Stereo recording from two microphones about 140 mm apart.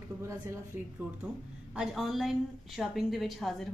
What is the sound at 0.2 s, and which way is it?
Speech, 20° right (ahead or behind).